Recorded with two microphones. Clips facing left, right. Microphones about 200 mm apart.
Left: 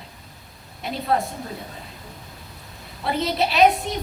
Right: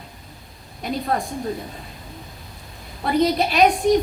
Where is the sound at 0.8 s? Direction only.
45° right (ahead or behind).